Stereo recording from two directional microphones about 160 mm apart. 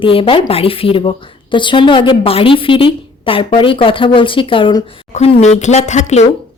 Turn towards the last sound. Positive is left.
turn(degrees=45)  # may be behind; listen again after turning